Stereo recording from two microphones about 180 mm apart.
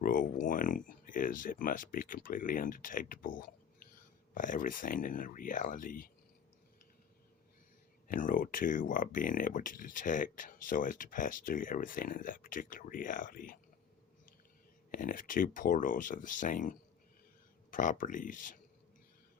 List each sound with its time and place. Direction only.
0.0 s speech: 50° left (ahead or behind)
8.0 s speech: 50° left (ahead or behind)
14.8 s speech: 50° left (ahead or behind)